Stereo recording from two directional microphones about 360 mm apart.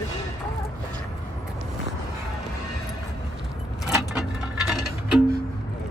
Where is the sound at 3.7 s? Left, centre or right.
Centre.